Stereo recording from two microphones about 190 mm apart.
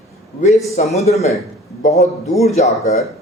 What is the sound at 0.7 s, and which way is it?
A man's voice, 35° left (ahead or behind).